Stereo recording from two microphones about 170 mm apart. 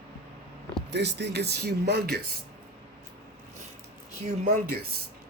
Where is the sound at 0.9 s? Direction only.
90° right; by 2.2 s 75° right (ahead or behind).